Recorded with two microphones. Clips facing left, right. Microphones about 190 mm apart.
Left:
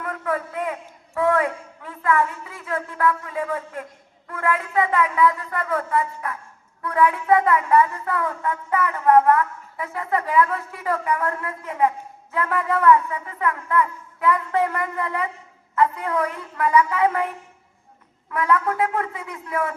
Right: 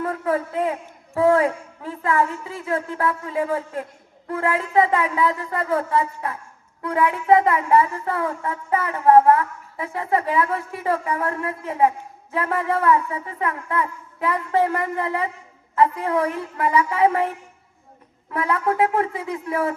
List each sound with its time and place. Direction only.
0.0 s a woman's voice: 30° right (ahead or behind)
18.3 s a woman's voice: 25° right (ahead or behind)